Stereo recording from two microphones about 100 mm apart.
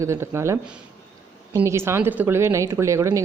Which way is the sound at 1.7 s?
25° right (ahead or behind).